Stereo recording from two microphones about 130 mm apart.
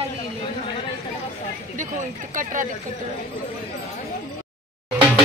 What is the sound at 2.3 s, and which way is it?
Speech, 85° right.